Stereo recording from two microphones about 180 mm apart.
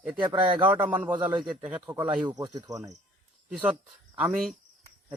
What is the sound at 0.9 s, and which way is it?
Speech, 5° right (ahead or behind).